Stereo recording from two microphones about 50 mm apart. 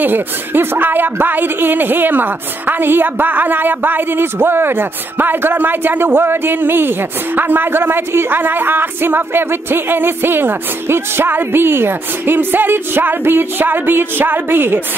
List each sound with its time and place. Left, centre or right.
0.0 s a woman's voice: right